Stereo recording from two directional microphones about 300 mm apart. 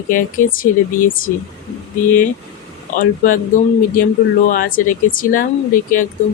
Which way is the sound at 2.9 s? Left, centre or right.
Left.